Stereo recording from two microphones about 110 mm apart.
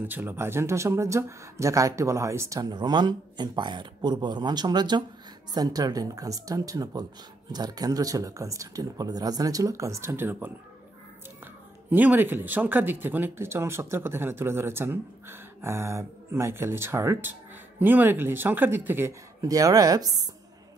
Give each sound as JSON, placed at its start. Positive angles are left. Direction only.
{"t": 0.0, "sound": "speech", "side_deg": -15}
{"t": 2.7, "sound": "speech", "side_deg": -40}
{"t": 11.9, "sound": "speech", "side_deg": -15}
{"t": 19.4, "sound": "speech", "side_deg": -30}